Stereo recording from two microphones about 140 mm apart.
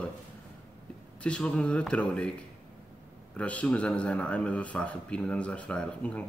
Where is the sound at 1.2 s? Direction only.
10° left (ahead or behind).